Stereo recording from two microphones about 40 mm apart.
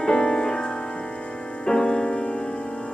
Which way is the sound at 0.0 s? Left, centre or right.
Centre.